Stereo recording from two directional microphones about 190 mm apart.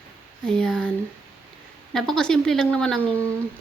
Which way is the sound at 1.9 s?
Centre (ahead or behind).